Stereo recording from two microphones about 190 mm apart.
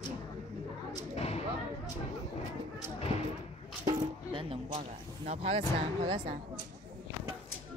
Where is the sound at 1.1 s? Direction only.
35° left (ahead or behind).